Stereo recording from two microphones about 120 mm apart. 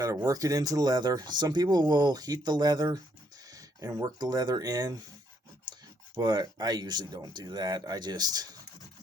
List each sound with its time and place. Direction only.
0.3 s speech: 30° right (ahead or behind)
6.1 s speech: 35° right (ahead or behind)